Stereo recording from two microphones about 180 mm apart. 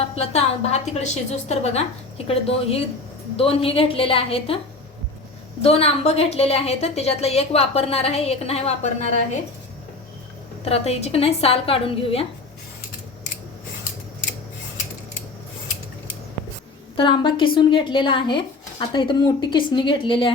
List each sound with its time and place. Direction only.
0.0 s a woman's voice: 35° left (ahead or behind)
5.6 s a woman's voice: 35° left (ahead or behind)
10.6 s a woman's voice: 35° left (ahead or behind)
17.0 s speech: 25° left (ahead or behind)